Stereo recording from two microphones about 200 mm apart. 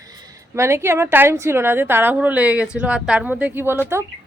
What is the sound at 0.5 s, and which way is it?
Speech, 15° right (ahead or behind).